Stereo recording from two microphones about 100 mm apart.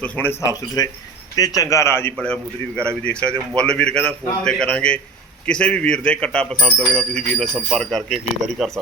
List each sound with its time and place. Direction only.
0.0 s a man's voice: 20° left (ahead or behind)
0.8 s a man's voice: 40° left (ahead or behind)
2.1 s a man's voice: 10° left (ahead or behind)